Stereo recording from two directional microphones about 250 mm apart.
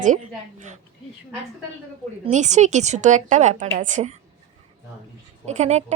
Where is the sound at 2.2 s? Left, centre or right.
Right.